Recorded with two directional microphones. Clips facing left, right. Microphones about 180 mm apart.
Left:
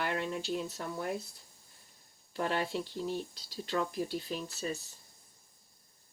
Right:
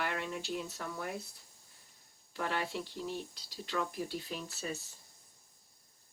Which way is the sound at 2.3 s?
35° left (ahead or behind).